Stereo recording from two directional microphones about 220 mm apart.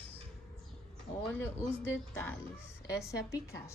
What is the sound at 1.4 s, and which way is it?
Speech, 10° left (ahead or behind).